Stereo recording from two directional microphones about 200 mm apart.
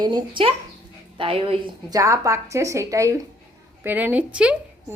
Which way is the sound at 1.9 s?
15° right (ahead or behind).